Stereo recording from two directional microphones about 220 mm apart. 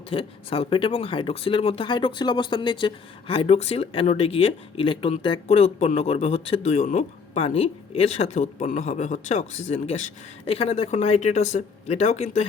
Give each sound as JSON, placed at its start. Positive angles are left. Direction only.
{"t": 0.1, "sound": "speech", "side_deg": 25}